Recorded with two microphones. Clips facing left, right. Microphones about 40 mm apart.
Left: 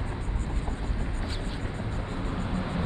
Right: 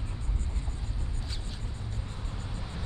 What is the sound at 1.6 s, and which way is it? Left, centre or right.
Music, left.